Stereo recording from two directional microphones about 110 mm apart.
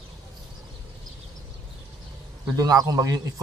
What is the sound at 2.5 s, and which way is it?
Speech, 35° right (ahead or behind).